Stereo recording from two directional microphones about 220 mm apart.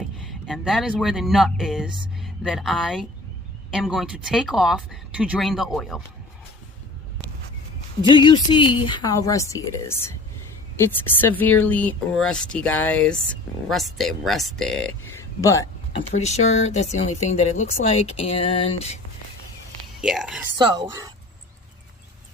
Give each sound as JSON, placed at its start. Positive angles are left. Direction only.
{"t": 0.2, "sound": "speech", "side_deg": 0}
{"t": 8.0, "sound": "speech", "side_deg": 20}
{"t": 15.9, "sound": "speech", "side_deg": 25}
{"t": 20.0, "sound": "speech", "side_deg": -5}